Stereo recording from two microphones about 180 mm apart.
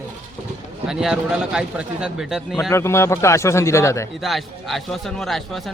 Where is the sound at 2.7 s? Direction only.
15° left (ahead or behind).